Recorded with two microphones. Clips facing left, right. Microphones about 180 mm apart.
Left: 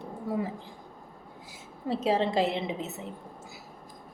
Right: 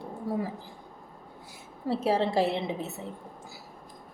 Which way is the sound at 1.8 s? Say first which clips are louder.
Even; 20° left (ahead or behind).